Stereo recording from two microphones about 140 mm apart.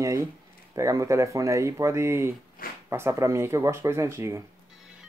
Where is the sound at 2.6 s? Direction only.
90° left.